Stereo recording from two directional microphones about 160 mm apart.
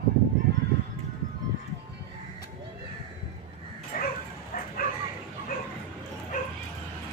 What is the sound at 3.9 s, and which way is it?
Bow-wow, 55° left (ahead or behind).